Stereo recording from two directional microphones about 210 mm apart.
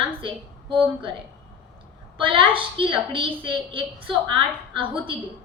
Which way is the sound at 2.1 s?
25° right (ahead or behind).